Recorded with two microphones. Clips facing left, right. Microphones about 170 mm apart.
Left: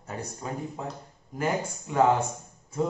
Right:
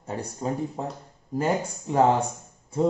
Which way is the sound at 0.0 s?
30° right (ahead or behind).